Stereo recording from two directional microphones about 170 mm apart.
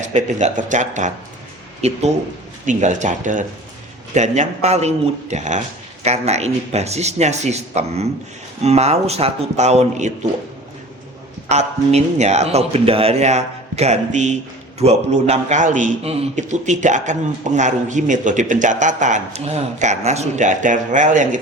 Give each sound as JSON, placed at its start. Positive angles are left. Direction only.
{"t": 0.0, "sound": "a man's voice", "side_deg": -45}
{"t": 11.4, "sound": "a man's voice", "side_deg": -40}